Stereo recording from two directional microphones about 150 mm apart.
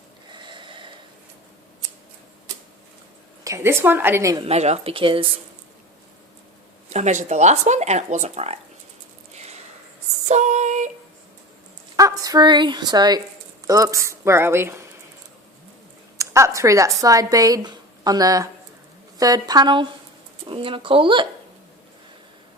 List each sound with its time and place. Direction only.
0.3 s snort: 30° right (ahead or behind)
3.4 s a woman's voice: 20° right (ahead or behind)
4.4 s speech: 45° right (ahead or behind)
6.9 s speech: 50° right (ahead or behind)
9.3 s a sound: 45° right (ahead or behind)
10.2 s female singing: 50° right (ahead or behind)
11.9 s speech: 25° right (ahead or behind)
16.1 s speech: 20° right (ahead or behind)